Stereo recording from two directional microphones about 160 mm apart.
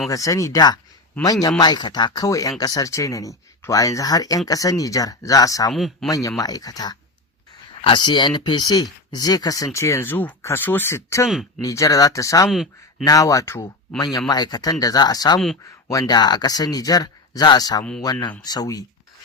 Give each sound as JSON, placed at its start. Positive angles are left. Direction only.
{"t": 0.1, "sound": "speech", "side_deg": 20}
{"t": 5.7, "sound": "speech", "side_deg": 0}
{"t": 6.1, "sound": "speech", "side_deg": 20}
{"t": 11.3, "sound": "speech", "side_deg": 0}
{"t": 11.6, "sound": "speech", "side_deg": 20}
{"t": 12.5, "sound": "speech", "side_deg": 0}
{"t": 13.1, "sound": "speech", "side_deg": 20}